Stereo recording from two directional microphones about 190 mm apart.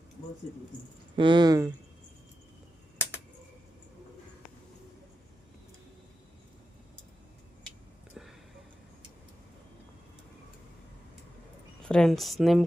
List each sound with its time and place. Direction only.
1.1 s speech: 25° right (ahead or behind)
8.1 s a sound: centre (ahead or behind)
11.9 s speech: 5° left (ahead or behind)